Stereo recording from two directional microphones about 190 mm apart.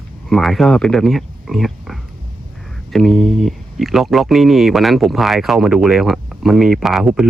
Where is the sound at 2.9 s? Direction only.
Centre (ahead or behind).